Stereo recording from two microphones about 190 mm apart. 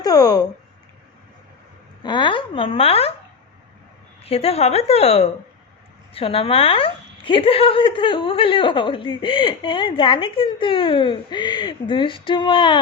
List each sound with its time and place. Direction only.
0.0 s speech: 20° left (ahead or behind)
2.0 s a woman's voice: 25° left (ahead or behind)
4.2 s a woman's voice: 30° left (ahead or behind)